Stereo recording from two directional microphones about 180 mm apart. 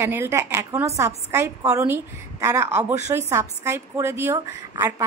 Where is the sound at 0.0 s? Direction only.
15° right (ahead or behind).